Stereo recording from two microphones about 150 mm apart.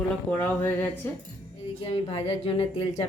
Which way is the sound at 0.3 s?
10° left (ahead or behind).